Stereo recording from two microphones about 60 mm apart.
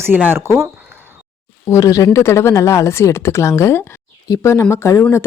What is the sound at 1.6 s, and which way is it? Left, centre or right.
Speech, left.